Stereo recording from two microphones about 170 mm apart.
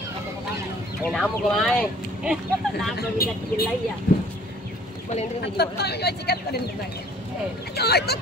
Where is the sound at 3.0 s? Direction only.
65° left (ahead or behind).